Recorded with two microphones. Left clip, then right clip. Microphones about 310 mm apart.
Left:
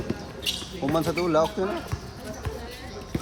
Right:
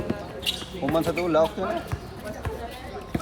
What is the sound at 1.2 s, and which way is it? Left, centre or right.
Speech, centre.